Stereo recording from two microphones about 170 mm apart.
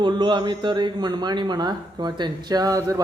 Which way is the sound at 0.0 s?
25° right (ahead or behind).